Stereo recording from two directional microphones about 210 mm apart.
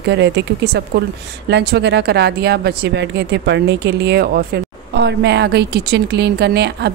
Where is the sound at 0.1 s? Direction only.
55° right (ahead or behind).